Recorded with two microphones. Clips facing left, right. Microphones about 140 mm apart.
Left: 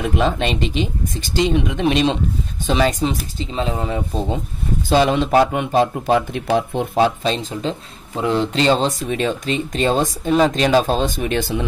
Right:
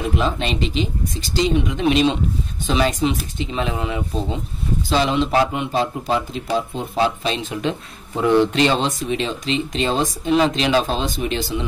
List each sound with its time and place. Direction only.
0.2 s speech: 50° left (ahead or behind)
1.9 s speech: centre (ahead or behind)
2.6 s speech: 45° left (ahead or behind)
4.8 s speech: 50° left (ahead or behind)
7.2 s speech: 40° left (ahead or behind)